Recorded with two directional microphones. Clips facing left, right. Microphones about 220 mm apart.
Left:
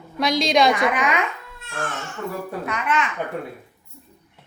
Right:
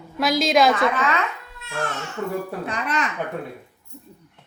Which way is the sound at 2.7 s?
35° right (ahead or behind).